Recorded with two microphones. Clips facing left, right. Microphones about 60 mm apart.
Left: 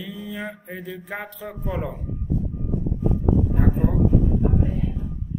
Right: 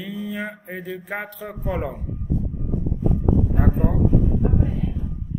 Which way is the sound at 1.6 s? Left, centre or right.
Centre.